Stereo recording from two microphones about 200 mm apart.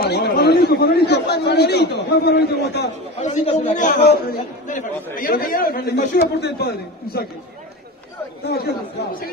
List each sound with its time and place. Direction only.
0.1 s a man's voice: 55° left (ahead or behind)
3.2 s a man's voice: 35° left (ahead or behind); by 7.2 s 50° left (ahead or behind)
8.5 s a man's voice: 55° left (ahead or behind)